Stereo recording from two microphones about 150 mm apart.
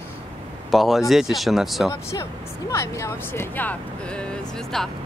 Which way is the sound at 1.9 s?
20° left (ahead or behind).